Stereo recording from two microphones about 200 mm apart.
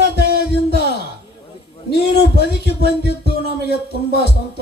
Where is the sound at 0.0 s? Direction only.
55° left (ahead or behind).